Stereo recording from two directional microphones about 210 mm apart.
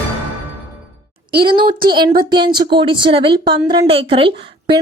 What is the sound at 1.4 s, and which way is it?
A woman's voice, 25° right (ahead or behind).